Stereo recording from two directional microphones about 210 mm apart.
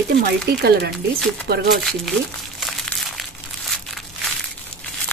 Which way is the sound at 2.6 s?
Centre (ahead or behind).